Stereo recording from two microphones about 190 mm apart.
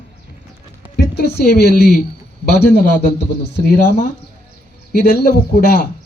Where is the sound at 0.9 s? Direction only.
60° left (ahead or behind).